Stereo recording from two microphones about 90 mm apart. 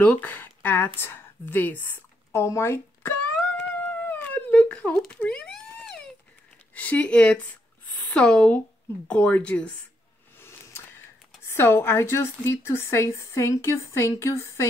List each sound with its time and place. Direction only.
0.0 s speech: 15° left (ahead or behind)
3.3 s music: 5° left (ahead or behind)
3.8 s cat: 15° left (ahead or behind)
5.2 s a sound: 10° left (ahead or behind)
6.7 s speech: 15° left (ahead or behind)
11.4 s a woman's voice: 25° left (ahead or behind)